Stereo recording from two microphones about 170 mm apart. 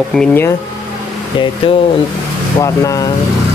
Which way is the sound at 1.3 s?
30° left (ahead or behind).